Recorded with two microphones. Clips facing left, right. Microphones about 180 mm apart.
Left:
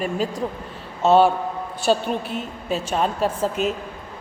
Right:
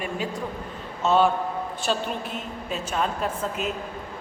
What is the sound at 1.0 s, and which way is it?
Speech, 30° left (ahead or behind).